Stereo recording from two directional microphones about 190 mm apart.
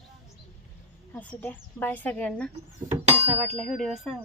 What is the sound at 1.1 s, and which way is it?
A woman's voice, 10° left (ahead or behind).